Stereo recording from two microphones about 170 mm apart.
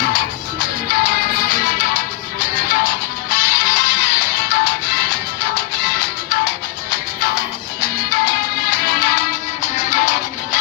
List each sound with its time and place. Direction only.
0.0 s music: 55° left (ahead or behind)